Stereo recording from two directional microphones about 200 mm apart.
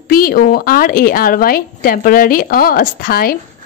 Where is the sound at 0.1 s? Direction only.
45° left (ahead or behind).